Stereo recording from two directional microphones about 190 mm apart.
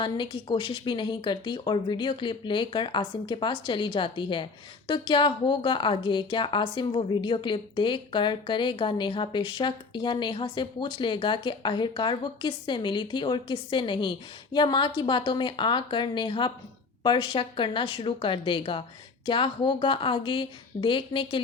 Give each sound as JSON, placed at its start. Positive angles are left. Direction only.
{"t": 0.0, "sound": "a woman's voice", "side_deg": 25}